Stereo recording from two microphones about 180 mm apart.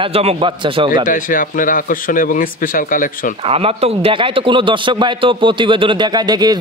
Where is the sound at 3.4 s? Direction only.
35° right (ahead or behind).